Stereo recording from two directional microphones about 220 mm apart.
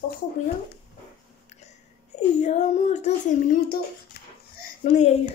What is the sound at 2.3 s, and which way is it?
A woman's voice, 30° left (ahead or behind).